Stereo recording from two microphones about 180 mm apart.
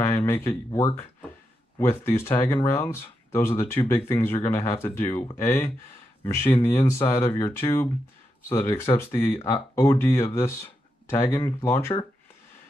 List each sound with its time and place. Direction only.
0.0 s speech: 15° left (ahead or behind)
6.9 s speech: 15° left (ahead or behind)